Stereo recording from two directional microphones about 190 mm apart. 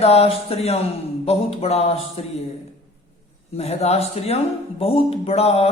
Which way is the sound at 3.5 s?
35° left (ahead or behind).